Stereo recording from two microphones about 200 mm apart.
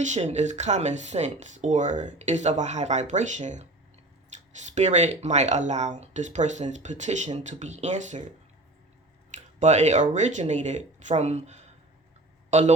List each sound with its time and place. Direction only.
0.0 s speech: 35° right (ahead or behind)
4.3 s a sound: 35° right (ahead or behind)
4.7 s speech: 35° right (ahead or behind)
9.3 s a man's voice: 35° right (ahead or behind)